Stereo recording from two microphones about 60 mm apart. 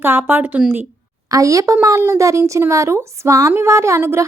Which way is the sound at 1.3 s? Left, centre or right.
Right.